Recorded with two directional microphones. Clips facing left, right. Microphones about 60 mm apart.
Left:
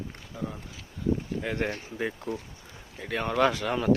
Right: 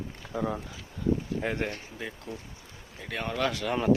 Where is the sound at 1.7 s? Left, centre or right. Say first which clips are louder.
Left 6 dB; left.